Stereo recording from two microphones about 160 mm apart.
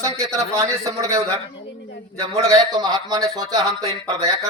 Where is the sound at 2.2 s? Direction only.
20° right (ahead or behind).